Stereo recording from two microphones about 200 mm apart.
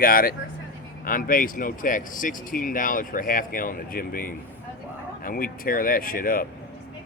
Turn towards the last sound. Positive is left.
turn(degrees=45)  # may be behind; listen again after turning